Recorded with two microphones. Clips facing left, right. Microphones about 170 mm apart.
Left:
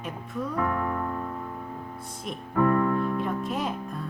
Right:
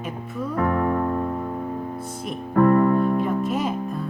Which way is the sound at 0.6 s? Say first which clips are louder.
Right 7 dB; 55° right (ahead or behind).